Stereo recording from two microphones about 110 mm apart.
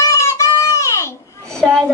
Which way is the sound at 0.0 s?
30° left (ahead or behind).